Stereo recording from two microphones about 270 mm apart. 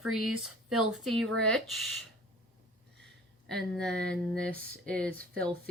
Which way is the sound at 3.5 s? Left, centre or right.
Centre.